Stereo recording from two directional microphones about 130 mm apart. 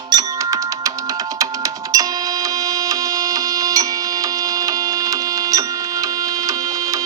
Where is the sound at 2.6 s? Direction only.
25° right (ahead or behind).